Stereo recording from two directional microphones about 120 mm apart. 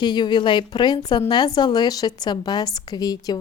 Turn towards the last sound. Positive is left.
turn(degrees=35)  # may be behind; listen again after turning